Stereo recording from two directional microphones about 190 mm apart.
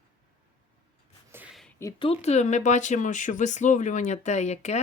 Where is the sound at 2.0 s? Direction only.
35° left (ahead or behind).